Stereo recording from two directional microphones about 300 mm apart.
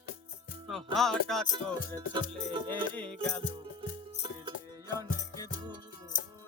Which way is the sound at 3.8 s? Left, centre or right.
Centre.